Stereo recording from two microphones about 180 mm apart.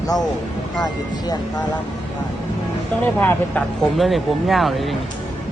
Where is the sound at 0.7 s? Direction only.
20° left (ahead or behind).